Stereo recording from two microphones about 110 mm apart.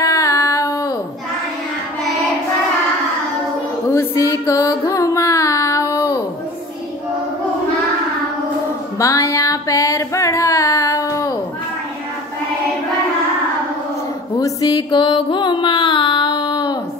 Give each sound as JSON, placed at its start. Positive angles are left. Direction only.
{"t": 0.0, "sound": "a sound", "side_deg": 30}
{"t": 3.9, "sound": "music", "side_deg": 25}
{"t": 8.9, "sound": "music", "side_deg": 30}
{"t": 14.4, "sound": "music", "side_deg": 35}